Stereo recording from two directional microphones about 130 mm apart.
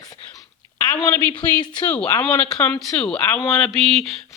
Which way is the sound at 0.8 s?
10° left (ahead or behind).